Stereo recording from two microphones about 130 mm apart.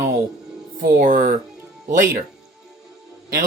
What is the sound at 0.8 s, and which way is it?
Speech, 90° right.